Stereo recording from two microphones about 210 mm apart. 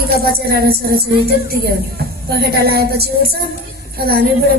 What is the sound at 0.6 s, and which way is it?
A woman's voice, 45° right (ahead or behind).